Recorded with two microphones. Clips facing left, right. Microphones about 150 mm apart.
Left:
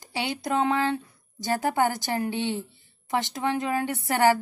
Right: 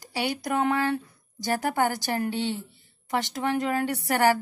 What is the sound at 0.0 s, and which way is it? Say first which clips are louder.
A woman's voice: right 1 dB; 20° left (ahead or behind).